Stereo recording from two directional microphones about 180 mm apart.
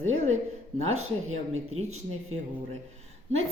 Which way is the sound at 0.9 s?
40° right (ahead or behind).